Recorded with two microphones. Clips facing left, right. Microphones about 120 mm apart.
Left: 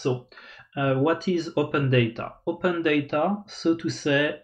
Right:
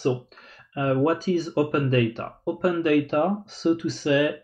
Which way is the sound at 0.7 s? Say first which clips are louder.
Even; 35° right (ahead or behind).